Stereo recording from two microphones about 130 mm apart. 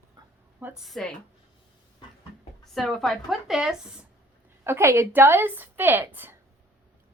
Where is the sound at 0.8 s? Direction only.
Centre (ahead or behind).